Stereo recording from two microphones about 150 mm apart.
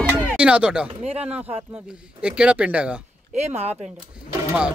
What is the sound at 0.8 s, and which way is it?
Speech, 40° right (ahead or behind).